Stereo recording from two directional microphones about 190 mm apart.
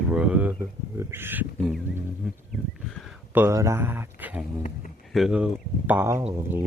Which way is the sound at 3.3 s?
15° right (ahead or behind).